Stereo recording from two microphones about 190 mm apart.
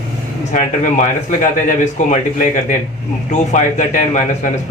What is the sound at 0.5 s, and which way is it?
Speech, 40° left (ahead or behind).